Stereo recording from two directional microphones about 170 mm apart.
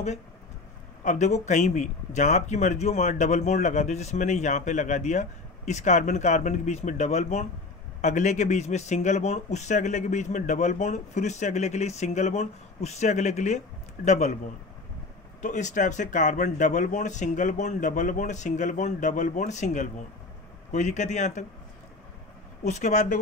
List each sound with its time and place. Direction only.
1.0 s a man's voice: 45° left (ahead or behind)
15.4 s a man's voice: 45° left (ahead or behind)
22.6 s a man's voice: 45° left (ahead or behind)